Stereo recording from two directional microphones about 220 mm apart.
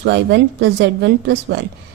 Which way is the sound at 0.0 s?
50° right (ahead or behind).